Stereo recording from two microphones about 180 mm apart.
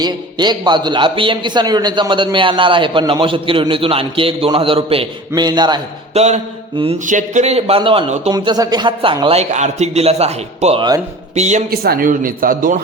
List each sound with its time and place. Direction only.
0.0 s a man's voice: 25° right (ahead or behind)
6.1 s a man's voice: 35° right (ahead or behind)
8.3 s a man's voice: 20° right (ahead or behind); by 11.6 s 40° right (ahead or behind)
11.7 s speech: 60° right (ahead or behind)